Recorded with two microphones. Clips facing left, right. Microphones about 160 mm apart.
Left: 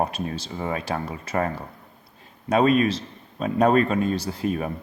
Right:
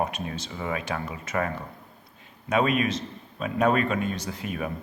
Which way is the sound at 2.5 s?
35° left (ahead or behind).